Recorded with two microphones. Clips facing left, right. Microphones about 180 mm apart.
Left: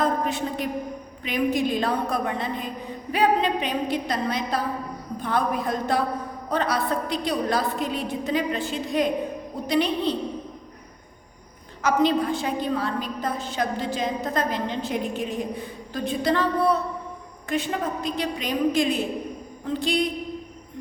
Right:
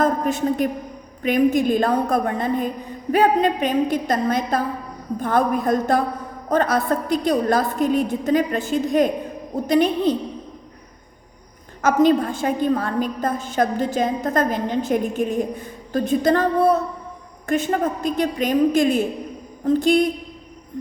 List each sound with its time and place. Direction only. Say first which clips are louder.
0.0 s a man's voice: right 5 dB; 45° right (ahead or behind)
11.8 s a woman's voice: right 5 dB; 50° right (ahead or behind)